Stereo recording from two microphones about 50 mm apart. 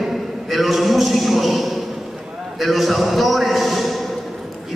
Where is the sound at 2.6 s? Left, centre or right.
Centre.